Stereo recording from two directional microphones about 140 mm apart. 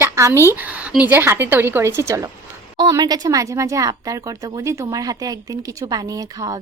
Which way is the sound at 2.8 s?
30° right (ahead or behind).